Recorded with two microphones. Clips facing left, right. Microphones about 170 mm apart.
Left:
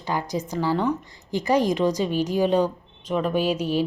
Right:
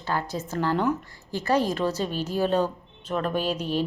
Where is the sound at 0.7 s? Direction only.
5° right (ahead or behind).